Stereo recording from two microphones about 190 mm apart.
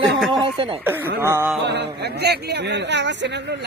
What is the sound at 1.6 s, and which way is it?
A man's voice, 65° right (ahead or behind).